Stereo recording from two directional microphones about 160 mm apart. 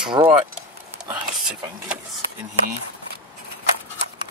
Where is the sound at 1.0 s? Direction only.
5° right (ahead or behind).